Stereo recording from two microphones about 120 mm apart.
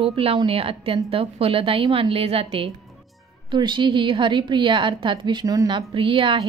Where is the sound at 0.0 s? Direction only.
50° right (ahead or behind).